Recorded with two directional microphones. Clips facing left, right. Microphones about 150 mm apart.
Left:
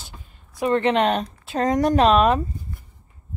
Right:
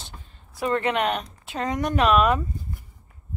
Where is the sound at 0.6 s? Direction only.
25° left (ahead or behind).